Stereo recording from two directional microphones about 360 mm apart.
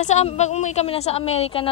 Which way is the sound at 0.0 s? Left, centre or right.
Centre.